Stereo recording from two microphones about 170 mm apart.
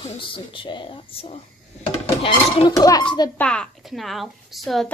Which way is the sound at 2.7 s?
20° left (ahead or behind).